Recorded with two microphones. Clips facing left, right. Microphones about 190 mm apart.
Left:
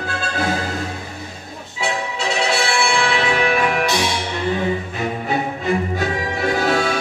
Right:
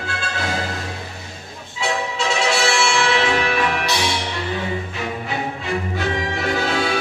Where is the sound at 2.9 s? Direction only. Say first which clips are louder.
Even; 50° left (ahead or behind).